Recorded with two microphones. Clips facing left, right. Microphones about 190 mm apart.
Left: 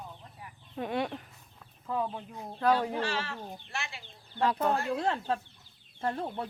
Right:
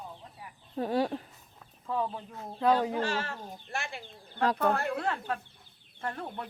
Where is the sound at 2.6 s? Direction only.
20° right (ahead or behind).